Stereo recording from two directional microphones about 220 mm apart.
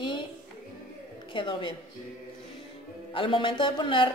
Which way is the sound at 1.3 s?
20° left (ahead or behind).